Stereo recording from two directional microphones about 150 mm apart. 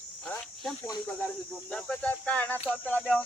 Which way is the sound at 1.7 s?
5° left (ahead or behind).